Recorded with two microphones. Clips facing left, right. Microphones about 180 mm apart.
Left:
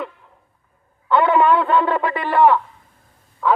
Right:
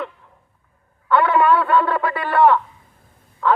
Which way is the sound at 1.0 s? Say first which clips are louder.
Left 1 dB; 20° left (ahead or behind).